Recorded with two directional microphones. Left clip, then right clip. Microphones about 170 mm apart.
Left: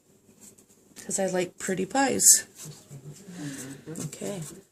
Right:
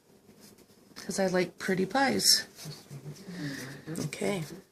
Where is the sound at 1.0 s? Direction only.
45° left (ahead or behind).